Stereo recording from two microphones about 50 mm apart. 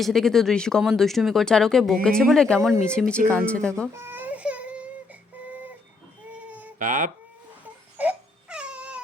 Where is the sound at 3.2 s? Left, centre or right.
Left.